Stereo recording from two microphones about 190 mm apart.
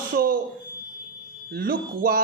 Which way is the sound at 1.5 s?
55° right (ahead or behind).